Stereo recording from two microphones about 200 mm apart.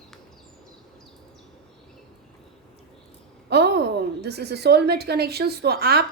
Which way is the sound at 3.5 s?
55° right (ahead or behind).